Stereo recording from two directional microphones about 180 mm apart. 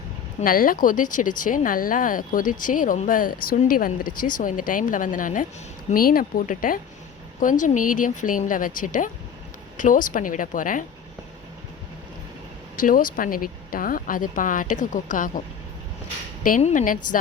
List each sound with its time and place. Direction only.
0.4 s speech: 50° left (ahead or behind)
12.7 s speech: 50° left (ahead or behind)
16.4 s speech: 45° left (ahead or behind)